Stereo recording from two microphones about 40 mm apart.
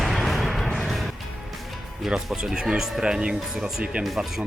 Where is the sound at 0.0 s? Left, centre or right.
Centre.